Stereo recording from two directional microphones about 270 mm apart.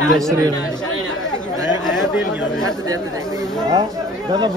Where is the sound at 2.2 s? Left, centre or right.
Left.